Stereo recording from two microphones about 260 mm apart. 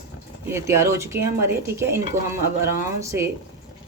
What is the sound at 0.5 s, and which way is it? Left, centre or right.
A woman's voice, centre.